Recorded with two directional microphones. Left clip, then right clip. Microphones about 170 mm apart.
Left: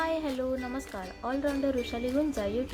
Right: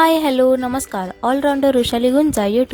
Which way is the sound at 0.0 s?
70° right (ahead or behind).